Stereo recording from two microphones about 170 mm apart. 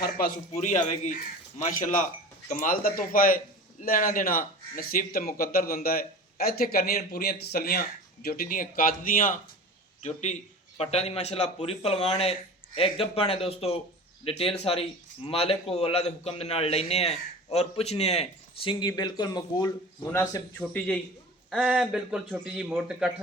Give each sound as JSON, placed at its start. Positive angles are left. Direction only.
{"t": 0.5, "sound": "a man's voice", "side_deg": 45}
{"t": 10.0, "sound": "a man's voice", "side_deg": 45}
{"t": 20.6, "sound": "a man's voice", "side_deg": 5}